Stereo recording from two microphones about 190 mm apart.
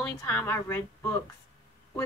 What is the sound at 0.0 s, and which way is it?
Speech, 10° left (ahead or behind).